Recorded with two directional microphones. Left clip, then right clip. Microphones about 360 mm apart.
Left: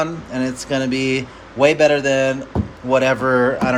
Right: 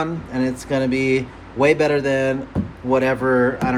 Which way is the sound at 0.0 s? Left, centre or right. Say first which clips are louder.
Left 1 dB; centre.